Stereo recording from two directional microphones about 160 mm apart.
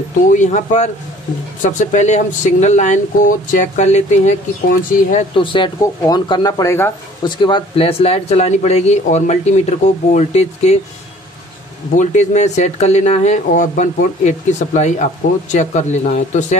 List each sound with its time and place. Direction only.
0.3 s speech: 50° left (ahead or behind)
5.3 s speech: 30° left (ahead or behind)
7.2 s speech: 30° left (ahead or behind)
12.0 s speech: 45° left (ahead or behind)